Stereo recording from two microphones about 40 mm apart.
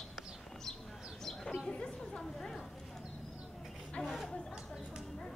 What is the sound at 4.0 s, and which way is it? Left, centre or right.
Chatter, left.